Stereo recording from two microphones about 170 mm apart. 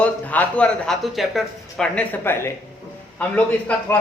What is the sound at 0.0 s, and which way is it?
Speech, 10° left (ahead or behind).